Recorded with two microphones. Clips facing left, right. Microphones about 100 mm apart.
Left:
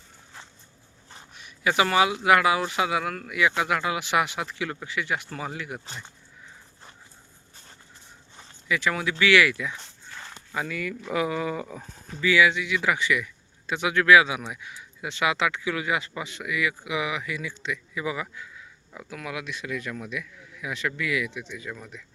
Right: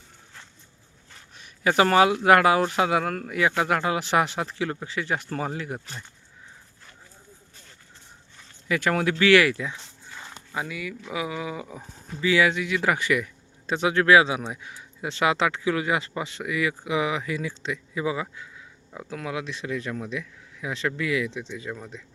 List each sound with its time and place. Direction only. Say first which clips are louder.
1.4 s speech: right 3 dB; 40° right (ahead or behind)
8.6 s speech: right 3 dB; 45° right (ahead or behind)
9.7 s dog: even; 5° right (ahead or behind)
10.5 s speech: left 1 dB; 15° right (ahead or behind)
12.2 s speech: even; 35° right (ahead or behind)